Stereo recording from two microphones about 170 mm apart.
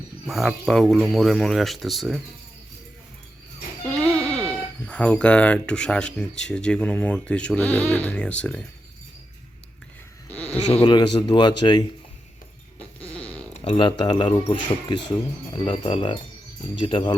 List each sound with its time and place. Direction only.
0.3 s speech: centre (ahead or behind)
4.2 s a sound: 5° left (ahead or behind)
4.9 s speech: 10° left (ahead or behind)
10.3 s a sound: 10° left (ahead or behind)
10.7 s speech: 30° left (ahead or behind)
13.0 s fart: 10° left (ahead or behind)
13.7 s speech: 30° left (ahead or behind)